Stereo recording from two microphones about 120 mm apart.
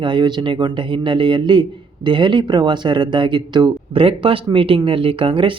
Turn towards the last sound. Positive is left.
turn(degrees=-45)  # may be behind; listen again after turning